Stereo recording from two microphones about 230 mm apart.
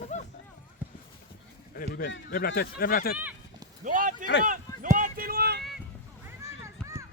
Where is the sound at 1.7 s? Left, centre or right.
Left.